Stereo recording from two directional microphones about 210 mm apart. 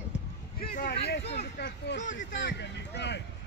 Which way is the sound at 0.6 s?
45° left (ahead or behind).